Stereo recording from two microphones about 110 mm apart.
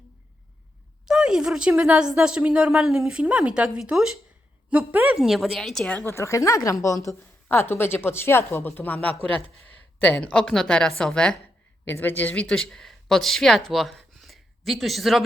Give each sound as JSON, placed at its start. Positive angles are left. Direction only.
{"t": 1.0, "sound": "a woman's voice", "side_deg": -5}
{"t": 5.1, "sound": "a woman's voice", "side_deg": -5}
{"t": 6.1, "sound": "a woman's voice", "side_deg": 25}